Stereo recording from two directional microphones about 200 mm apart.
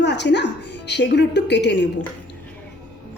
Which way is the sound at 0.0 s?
60° left (ahead or behind).